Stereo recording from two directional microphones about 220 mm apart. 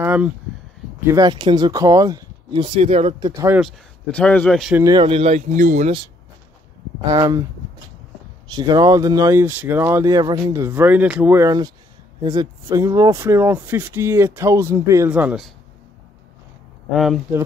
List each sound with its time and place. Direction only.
0.0 s a sound: 5° right (ahead or behind)
1.0 s speech: 15° right (ahead or behind)
3.6 s speech: 5° left (ahead or behind)
4.8 s speech: 20° right (ahead or behind)
7.1 s speech: 15° right (ahead or behind)
8.5 s speech: 20° right (ahead or behind)
16.9 s speech: centre (ahead or behind)